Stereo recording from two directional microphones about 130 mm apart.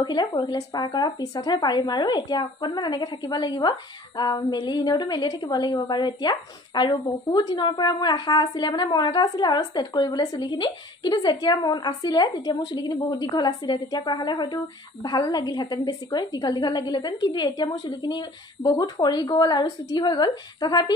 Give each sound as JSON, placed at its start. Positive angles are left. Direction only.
{"t": 0.0, "sound": "a woman's voice", "side_deg": 35}